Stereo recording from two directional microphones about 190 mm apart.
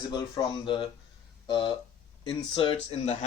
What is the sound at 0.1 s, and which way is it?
Speech, 25° left (ahead or behind).